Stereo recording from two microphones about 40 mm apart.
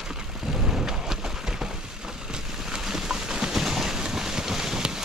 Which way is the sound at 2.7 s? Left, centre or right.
Centre.